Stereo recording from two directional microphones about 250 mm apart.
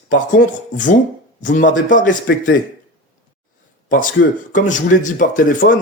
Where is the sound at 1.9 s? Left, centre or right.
Left.